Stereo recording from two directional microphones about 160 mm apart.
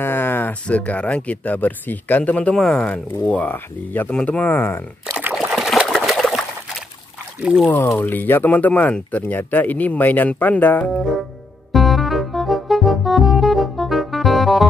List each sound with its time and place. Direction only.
0.0 s speech: 15° left (ahead or behind)
5.1 s trickle: 5° right (ahead or behind)
7.3 s speech: 10° right (ahead or behind)
7.6 s speech: 15° left (ahead or behind)
11.7 s music: centre (ahead or behind)